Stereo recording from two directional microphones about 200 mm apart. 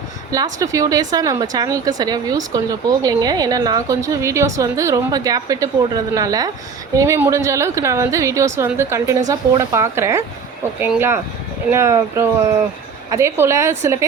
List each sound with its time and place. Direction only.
0.3 s a woman's voice: 15° right (ahead or behind)